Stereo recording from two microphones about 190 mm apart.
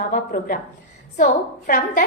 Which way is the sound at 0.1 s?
50° left (ahead or behind).